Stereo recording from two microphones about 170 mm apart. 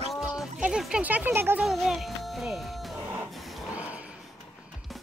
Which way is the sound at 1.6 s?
Centre (ahead or behind).